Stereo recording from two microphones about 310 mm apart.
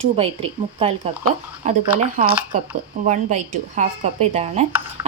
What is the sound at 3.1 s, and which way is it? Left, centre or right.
Speech, right.